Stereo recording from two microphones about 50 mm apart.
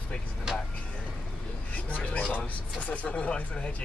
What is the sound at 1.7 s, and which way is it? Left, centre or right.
Speech, left.